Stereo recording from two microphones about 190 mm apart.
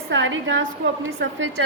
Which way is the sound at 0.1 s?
70° right (ahead or behind).